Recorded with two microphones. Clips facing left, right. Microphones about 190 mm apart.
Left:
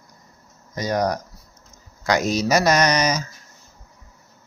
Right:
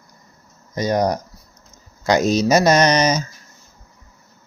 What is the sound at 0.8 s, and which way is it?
Speech, 25° right (ahead or behind).